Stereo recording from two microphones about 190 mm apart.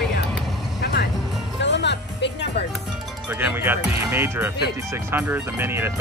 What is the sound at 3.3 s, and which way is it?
Music, 10° right (ahead or behind).